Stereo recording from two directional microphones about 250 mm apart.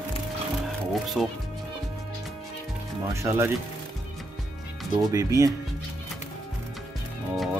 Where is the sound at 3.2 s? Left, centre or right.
Centre.